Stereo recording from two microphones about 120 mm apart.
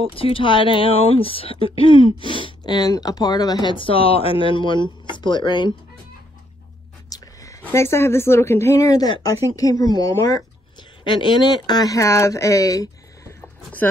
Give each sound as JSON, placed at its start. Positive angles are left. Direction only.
{"t": 0.1, "sound": "speech", "side_deg": 50}
{"t": 7.1, "sound": "a sound", "side_deg": 25}
{"t": 7.6, "sound": "a woman's voice", "side_deg": 20}
{"t": 10.8, "sound": "speech", "side_deg": 40}